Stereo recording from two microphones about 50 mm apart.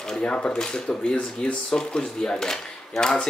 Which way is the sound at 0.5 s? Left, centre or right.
Centre.